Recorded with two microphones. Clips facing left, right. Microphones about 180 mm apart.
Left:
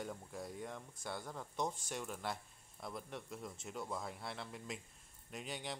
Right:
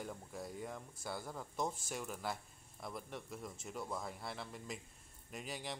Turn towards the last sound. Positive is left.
turn(degrees=0)  # may be behind; listen again after turning